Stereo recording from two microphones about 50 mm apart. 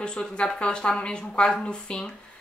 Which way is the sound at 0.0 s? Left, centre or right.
Centre.